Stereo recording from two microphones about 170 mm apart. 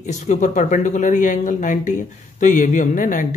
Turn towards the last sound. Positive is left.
turn(degrees=50)  # may be behind; listen again after turning